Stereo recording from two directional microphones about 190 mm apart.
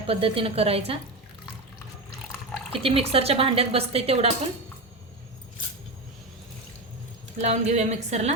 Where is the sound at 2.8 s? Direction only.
30° right (ahead or behind).